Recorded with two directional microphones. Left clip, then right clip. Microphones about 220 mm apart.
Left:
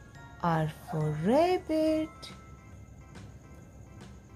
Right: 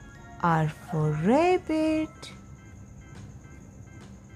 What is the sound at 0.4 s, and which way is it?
Speech, 15° right (ahead or behind).